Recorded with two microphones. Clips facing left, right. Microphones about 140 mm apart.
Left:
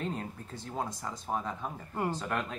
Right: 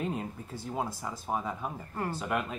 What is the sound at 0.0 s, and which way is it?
Speech, 10° right (ahead or behind).